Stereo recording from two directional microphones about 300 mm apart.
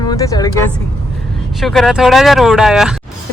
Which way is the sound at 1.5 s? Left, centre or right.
Centre.